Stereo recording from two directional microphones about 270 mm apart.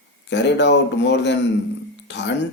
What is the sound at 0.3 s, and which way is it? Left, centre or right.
Speech, left.